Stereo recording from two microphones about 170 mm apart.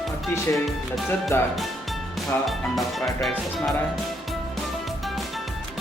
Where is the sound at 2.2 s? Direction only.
Centre (ahead or behind).